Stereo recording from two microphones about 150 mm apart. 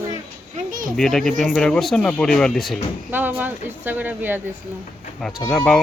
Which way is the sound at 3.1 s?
15° right (ahead or behind).